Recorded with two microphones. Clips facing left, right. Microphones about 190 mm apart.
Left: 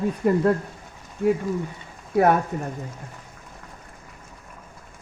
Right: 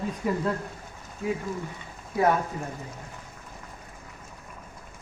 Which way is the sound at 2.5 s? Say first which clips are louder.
Left 5 dB; 60° left (ahead or behind).